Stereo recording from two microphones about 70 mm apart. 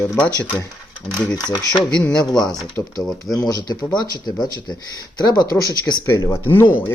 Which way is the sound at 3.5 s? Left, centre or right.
Left.